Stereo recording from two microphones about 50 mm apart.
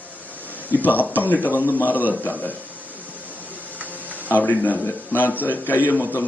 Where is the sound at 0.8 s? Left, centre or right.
Left.